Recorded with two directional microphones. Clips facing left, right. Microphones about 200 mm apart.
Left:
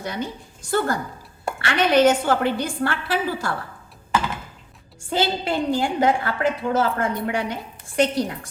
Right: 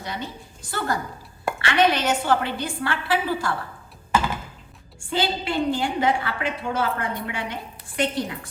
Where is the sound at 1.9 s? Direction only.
45° left (ahead or behind).